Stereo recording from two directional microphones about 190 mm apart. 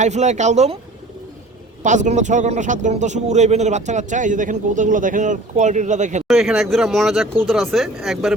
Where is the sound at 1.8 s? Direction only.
40° right (ahead or behind).